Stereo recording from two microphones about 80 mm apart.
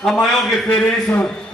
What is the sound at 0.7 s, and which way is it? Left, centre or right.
Speech, left.